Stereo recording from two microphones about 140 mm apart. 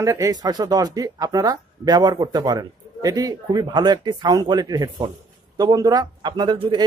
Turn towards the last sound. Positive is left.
turn(degrees=-35)  # may be behind; listen again after turning